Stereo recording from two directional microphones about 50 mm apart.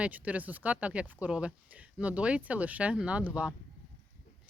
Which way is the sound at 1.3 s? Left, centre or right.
Centre.